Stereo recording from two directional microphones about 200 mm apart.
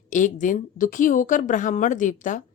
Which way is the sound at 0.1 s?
40° left (ahead or behind).